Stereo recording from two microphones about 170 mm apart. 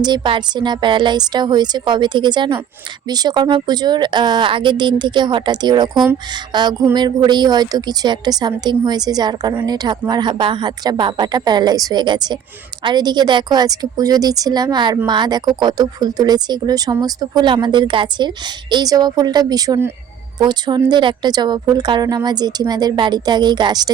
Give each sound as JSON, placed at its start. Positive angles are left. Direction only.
{"t": 0.0, "sound": "a woman's voice", "side_deg": -25}